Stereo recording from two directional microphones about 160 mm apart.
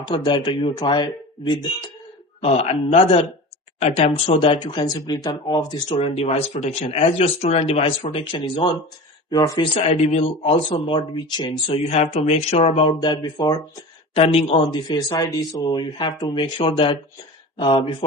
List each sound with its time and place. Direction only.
0.0 s speech: 30° left (ahead or behind)
2.4 s speech: 35° left (ahead or behind)
9.9 s speech: 45° left (ahead or behind)
10.7 s speech: 30° left (ahead or behind)
14.1 s speech: 40° left (ahead or behind)